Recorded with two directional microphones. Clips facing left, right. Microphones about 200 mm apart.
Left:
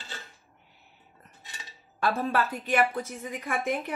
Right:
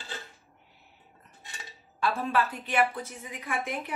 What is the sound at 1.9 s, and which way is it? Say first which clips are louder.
A woman's voice: left 1 dB; 45° left (ahead or behind).